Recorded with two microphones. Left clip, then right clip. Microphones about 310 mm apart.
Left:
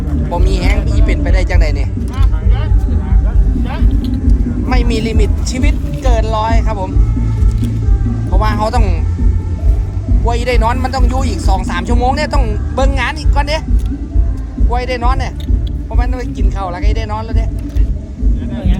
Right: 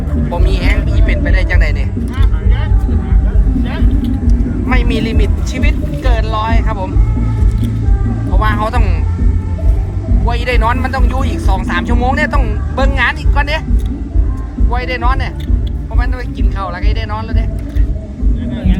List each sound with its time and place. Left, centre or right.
0.3 s speech: centre
4.7 s speech: centre
8.4 s a woman's voice: centre
10.2 s a woman's voice: centre
14.7 s speech: centre